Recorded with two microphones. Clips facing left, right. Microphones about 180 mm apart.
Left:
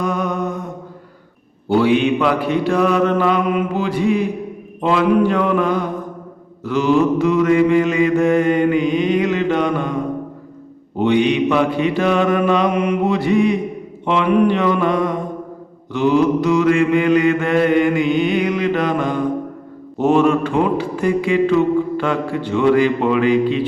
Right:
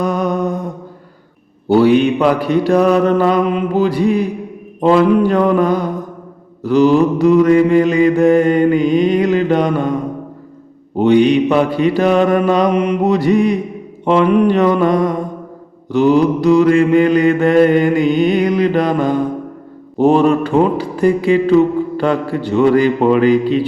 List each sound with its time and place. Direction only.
0.0 s mantra: 35° right (ahead or behind)
1.6 s mantra: 40° right (ahead or behind)
10.9 s mantra: 40° right (ahead or behind)